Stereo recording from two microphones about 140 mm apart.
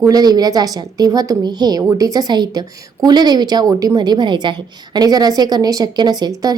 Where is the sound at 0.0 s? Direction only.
25° right (ahead or behind).